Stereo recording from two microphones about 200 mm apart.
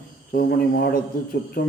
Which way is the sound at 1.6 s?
50° left (ahead or behind).